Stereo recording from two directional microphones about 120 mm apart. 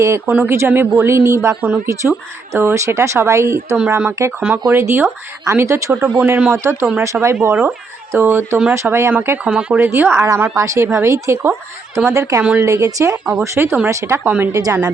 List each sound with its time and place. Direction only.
0.3 s speech: 15° right (ahead or behind)
12.4 s speech: 10° right (ahead or behind)
12.6 s speech: 25° right (ahead or behind)